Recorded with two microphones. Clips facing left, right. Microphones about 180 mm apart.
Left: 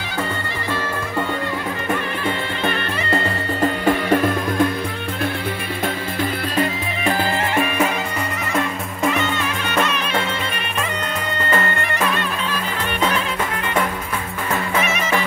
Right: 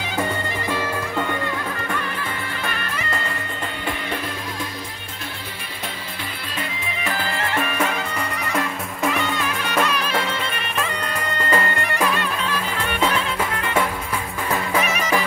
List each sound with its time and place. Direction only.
2.6 s music: 25° left (ahead or behind)
3.6 s music: 45° left (ahead or behind)
7.1 s music: 25° left (ahead or behind)
7.5 s music: 10° left (ahead or behind)
8.5 s music: centre (ahead or behind)
11.5 s music: 10° right (ahead or behind)